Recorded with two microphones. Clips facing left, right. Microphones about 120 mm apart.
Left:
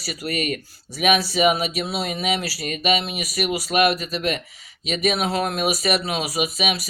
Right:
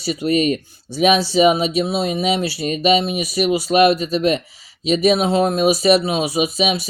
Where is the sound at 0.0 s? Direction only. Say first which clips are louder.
Right 9 dB; 25° right (ahead or behind).